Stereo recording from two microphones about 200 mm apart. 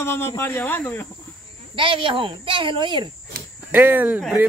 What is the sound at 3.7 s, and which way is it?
Speech, 10° right (ahead or behind).